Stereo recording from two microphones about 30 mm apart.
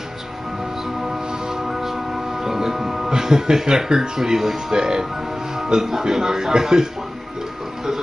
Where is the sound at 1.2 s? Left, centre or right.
Right.